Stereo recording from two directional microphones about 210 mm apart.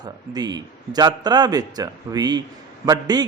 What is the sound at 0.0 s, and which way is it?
A man's voice, 20° right (ahead or behind).